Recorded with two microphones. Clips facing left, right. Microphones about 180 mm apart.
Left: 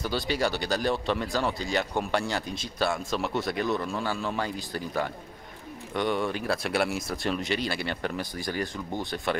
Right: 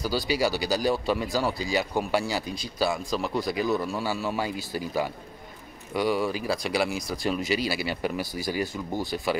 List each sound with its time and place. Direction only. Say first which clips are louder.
0.0 s speech: right 2 dB; 5° right (ahead or behind)